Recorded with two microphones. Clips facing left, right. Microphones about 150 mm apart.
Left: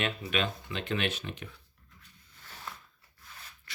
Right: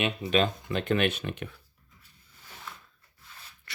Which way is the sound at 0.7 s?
50° right (ahead or behind).